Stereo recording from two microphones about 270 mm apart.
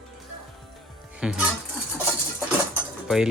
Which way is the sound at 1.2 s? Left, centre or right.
Centre.